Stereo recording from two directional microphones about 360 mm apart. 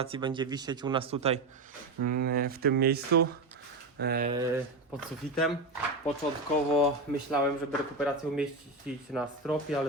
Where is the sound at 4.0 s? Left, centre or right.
Right.